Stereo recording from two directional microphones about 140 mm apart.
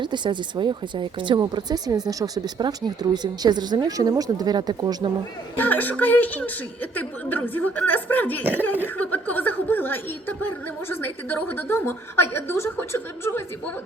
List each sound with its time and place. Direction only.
0.0 s speech: 35° right (ahead or behind)
5.5 s speech: 10° left (ahead or behind)